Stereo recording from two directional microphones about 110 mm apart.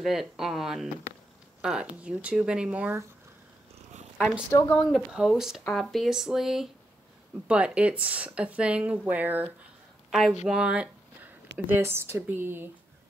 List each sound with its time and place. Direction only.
0.0 s speech: 5° right (ahead or behind)
4.2 s a woman's voice: 20° left (ahead or behind)
5.1 s speech: 5° right (ahead or behind)